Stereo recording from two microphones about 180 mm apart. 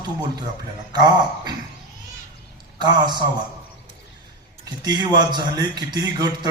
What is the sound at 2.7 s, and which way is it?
Speech, 25° right (ahead or behind).